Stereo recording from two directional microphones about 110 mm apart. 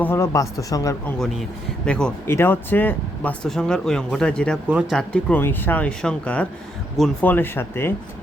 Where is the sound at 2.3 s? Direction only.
20° left (ahead or behind).